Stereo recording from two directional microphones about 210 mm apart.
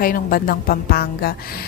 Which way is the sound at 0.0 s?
45° left (ahead or behind).